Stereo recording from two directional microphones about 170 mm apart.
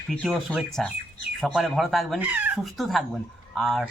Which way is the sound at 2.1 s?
10° right (ahead or behind).